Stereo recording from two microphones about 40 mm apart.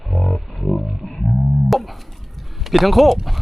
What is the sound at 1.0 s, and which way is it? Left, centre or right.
Guitar, centre.